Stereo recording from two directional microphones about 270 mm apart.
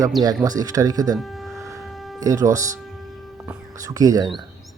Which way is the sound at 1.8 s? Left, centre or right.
Centre.